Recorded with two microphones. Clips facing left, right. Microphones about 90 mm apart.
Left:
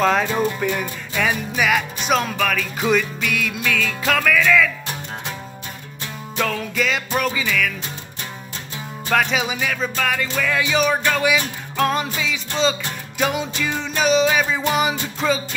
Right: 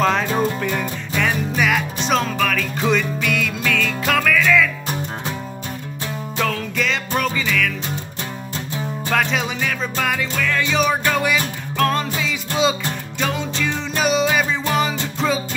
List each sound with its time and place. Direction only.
0.0 s music: centre (ahead or behind)
6.4 s music: 5° left (ahead or behind)
9.1 s music: centre (ahead or behind)
11.7 s music: 15° left (ahead or behind)
12.2 s music: 5° right (ahead or behind)
13.2 s music: 10° left (ahead or behind)
14.6 s music: 15° left (ahead or behind)
15.1 s music: centre (ahead or behind)